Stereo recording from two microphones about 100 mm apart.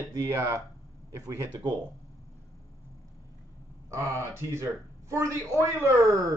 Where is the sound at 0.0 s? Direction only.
30° right (ahead or behind).